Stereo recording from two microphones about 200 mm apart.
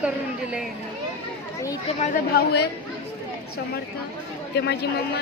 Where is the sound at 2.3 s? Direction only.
55° left (ahead or behind).